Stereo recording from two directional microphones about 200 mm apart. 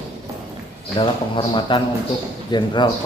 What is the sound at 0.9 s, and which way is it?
A man's voice, 25° left (ahead or behind).